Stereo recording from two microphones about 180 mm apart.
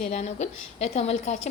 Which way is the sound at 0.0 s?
40° left (ahead or behind).